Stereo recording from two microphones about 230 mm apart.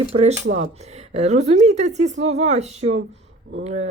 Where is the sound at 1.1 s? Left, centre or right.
Right.